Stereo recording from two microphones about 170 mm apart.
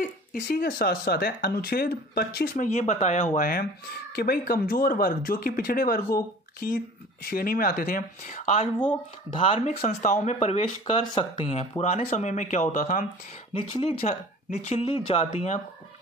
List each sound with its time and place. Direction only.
0.0 s speech: 60° left (ahead or behind); by 3.3 s 40° left (ahead or behind)
3.3 s speech: 55° left (ahead or behind)
9.3 s speech: 30° left (ahead or behind); by 13.0 s 50° left (ahead or behind)
13.5 s speech: 35° left (ahead or behind)